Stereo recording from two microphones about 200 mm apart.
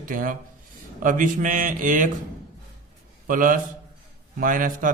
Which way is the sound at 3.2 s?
40° right (ahead or behind).